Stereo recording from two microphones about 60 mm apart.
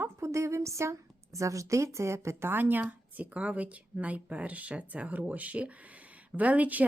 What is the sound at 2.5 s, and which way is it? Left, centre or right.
A woman's voice, right.